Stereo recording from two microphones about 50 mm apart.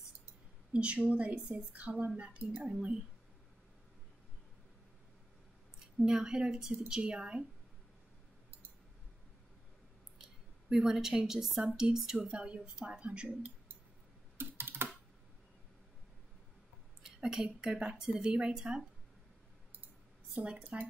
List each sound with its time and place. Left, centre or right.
0.7 s speech: right
6.0 s a woman's voice: centre
10.1 s a sound: centre
11.7 s a woman's voice: centre
12.4 s speech: right
14.4 s typing: right
17.0 s a woman's voice: centre
20.3 s speech: right